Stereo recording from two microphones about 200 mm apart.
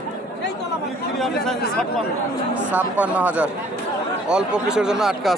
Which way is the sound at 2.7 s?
5° right (ahead or behind).